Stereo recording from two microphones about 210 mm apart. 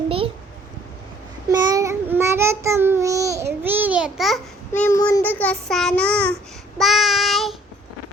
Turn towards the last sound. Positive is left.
turn(degrees=0)  # may be behind; listen again after turning